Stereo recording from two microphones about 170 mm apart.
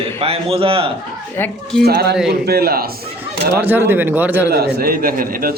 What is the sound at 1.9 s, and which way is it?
A man's voice, 75° right (ahead or behind).